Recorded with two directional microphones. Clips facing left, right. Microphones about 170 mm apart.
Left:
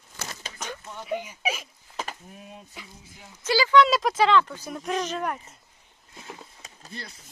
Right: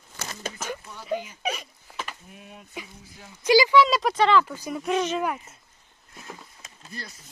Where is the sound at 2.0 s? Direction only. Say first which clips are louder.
Left 2 dB; 40° left (ahead or behind).